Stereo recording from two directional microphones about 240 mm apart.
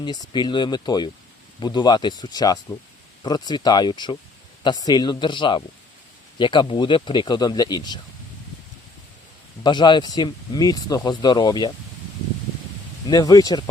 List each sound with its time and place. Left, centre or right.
0.0 s speech: centre
9.6 s speech: centre
13.1 s speech: centre